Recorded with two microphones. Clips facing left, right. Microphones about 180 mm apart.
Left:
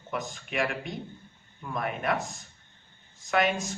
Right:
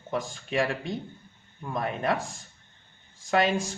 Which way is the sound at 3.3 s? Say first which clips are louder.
Right 2 dB; 30° right (ahead or behind).